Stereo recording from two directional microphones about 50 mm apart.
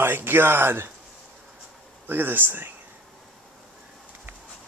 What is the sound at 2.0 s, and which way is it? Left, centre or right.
Speech, right.